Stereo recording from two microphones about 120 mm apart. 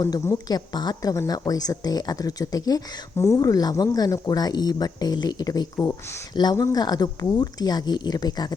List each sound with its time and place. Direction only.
0.0 s speech: 30° left (ahead or behind)